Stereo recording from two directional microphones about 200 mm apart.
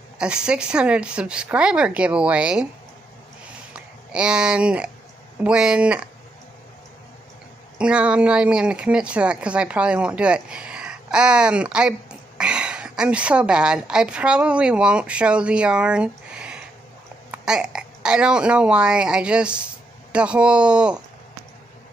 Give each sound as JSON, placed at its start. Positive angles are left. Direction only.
{"t": 0.2, "sound": "speech", "side_deg": -5}
{"t": 3.7, "sound": "speech", "side_deg": -5}
{"t": 7.8, "sound": "speech", "side_deg": -5}